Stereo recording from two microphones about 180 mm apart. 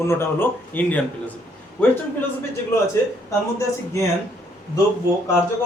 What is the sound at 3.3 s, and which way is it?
Speech, 15° left (ahead or behind).